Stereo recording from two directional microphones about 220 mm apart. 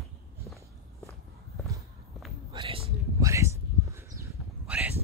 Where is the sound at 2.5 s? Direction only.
25° right (ahead or behind).